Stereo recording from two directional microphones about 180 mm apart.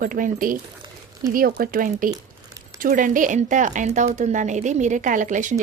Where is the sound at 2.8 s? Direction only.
50° right (ahead or behind).